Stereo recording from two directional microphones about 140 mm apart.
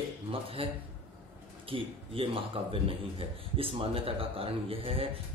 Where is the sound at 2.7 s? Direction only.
40° right (ahead or behind).